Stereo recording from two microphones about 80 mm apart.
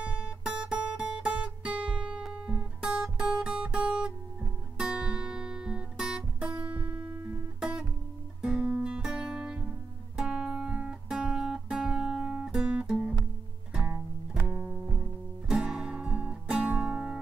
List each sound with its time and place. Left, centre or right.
0.0 s guitar: centre
4.7 s music: centre
6.6 s music: centre
8.4 s guitar: centre
13.7 s music: centre